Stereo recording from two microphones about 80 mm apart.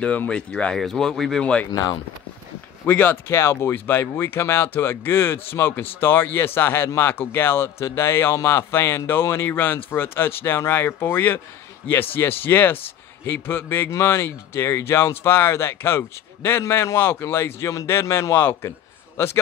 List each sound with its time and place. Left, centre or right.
0.0 s speech: centre
1.4 s speech: centre
1.7 s speech: left
2.8 s speech: left
3.3 s speech: left